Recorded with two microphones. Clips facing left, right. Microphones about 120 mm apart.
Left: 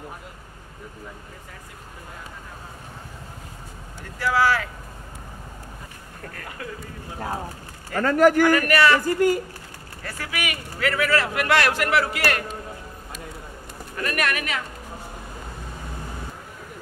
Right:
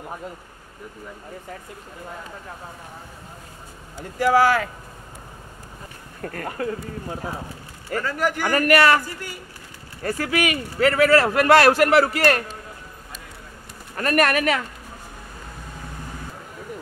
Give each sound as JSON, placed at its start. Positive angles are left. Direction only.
{"t": 4.2, "sound": "speech", "side_deg": -45}
{"t": 6.2, "sound": "speech", "side_deg": -40}
{"t": 7.9, "sound": "speech", "side_deg": 50}
{"t": 8.4, "sound": "speech", "side_deg": -45}
{"t": 9.0, "sound": "speech", "side_deg": 45}
{"t": 10.0, "sound": "speech", "side_deg": -40}
{"t": 13.9, "sound": "speech", "side_deg": -40}